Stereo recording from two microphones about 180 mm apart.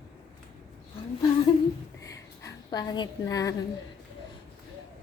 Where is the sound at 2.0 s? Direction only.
20° left (ahead or behind).